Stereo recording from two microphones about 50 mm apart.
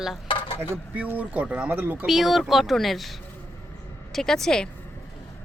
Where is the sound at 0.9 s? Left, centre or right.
Right.